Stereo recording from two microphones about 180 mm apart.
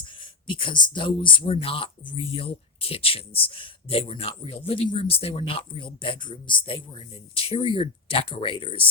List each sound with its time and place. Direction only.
0.5 s speech: 25° left (ahead or behind)